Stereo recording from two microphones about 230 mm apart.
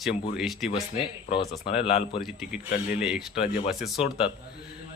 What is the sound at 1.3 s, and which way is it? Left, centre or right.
Speech, left.